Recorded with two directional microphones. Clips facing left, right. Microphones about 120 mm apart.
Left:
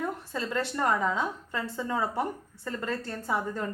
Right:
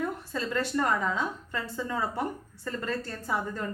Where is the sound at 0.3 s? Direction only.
25° left (ahead or behind).